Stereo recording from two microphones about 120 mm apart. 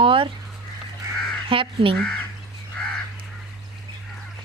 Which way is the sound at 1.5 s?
45° right (ahead or behind).